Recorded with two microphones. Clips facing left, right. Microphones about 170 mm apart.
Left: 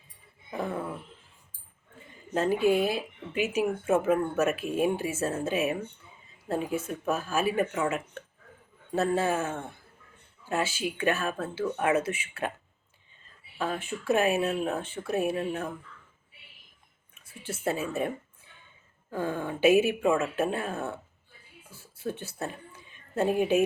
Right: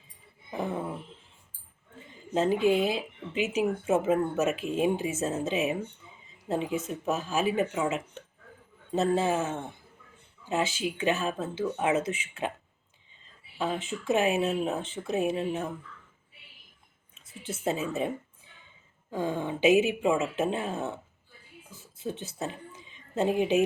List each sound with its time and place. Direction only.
0.5 s a sound: 20° right (ahead or behind)
2.3 s speech: 20° right (ahead or behind)
6.7 s speech: 20° right (ahead or behind)
13.6 s speech: 20° right (ahead or behind)
17.2 s a sound: 20° right (ahead or behind)
17.7 s speech: 20° right (ahead or behind)
19.1 s speech: 15° right (ahead or behind)
21.7 s a sound: 20° right (ahead or behind)
23.1 s speech: 15° right (ahead or behind)